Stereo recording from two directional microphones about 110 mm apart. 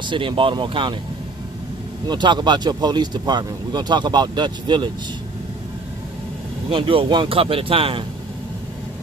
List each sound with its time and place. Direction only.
0.0 s speech: 45° right (ahead or behind)
2.0 s speech: 45° right (ahead or behind)
6.7 s speech: 55° right (ahead or behind)